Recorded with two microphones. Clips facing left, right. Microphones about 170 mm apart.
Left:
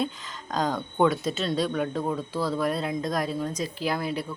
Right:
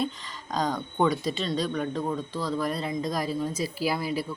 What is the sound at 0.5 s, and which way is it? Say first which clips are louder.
Speech: left 1 dB; centre (ahead or behind).